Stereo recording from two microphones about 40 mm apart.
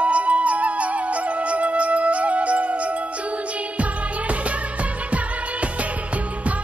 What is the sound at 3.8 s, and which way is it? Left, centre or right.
Music, right.